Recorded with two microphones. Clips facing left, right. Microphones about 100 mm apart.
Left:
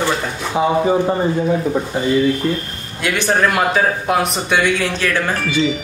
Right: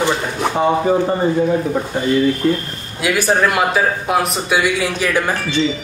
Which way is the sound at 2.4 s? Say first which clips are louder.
Right 3 dB; centre (ahead or behind).